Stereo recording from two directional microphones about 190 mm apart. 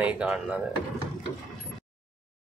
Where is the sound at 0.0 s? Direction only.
5° right (ahead or behind).